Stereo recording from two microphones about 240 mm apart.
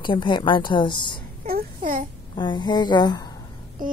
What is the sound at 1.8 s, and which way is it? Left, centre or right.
Speech, right.